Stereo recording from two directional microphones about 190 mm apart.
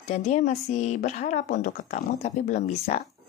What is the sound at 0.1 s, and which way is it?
Speech, 40° left (ahead or behind).